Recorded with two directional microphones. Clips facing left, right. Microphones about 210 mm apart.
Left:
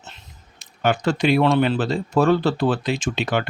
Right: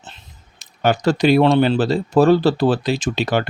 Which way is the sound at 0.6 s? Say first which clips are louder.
Right 3 dB; 40° right (ahead or behind).